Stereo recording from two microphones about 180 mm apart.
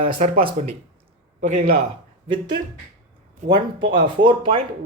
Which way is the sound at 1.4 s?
45° right (ahead or behind).